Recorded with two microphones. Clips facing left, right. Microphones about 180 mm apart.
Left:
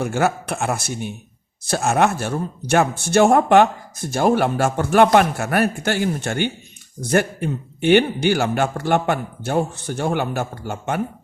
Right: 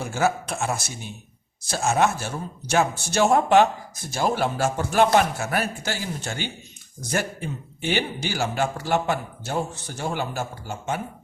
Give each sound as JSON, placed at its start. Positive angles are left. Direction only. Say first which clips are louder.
{"t": 0.0, "sound": "speech", "louder": "left 3 dB", "side_deg": 60}